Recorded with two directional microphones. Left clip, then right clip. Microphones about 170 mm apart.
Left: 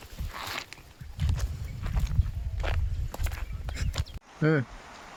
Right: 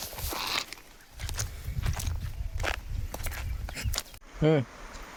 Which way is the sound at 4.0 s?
90° right.